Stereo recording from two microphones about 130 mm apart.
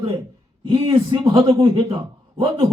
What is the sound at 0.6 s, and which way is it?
A man's voice, 45° right (ahead or behind).